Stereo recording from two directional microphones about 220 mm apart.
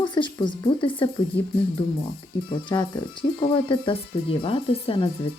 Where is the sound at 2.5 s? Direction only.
20° left (ahead or behind).